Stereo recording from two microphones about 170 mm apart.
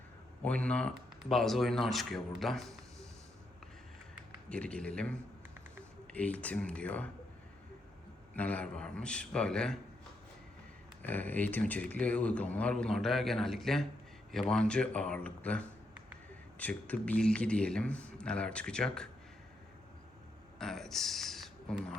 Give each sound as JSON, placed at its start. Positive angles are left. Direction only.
{"t": 0.4, "sound": "a man's voice", "side_deg": 5}
{"t": 4.4, "sound": "speech", "side_deg": 5}
{"t": 6.1, "sound": "speech", "side_deg": 10}
{"t": 8.4, "sound": "a man's voice", "side_deg": 10}
{"t": 11.0, "sound": "speech", "side_deg": 10}
{"t": 20.6, "sound": "speech", "side_deg": 5}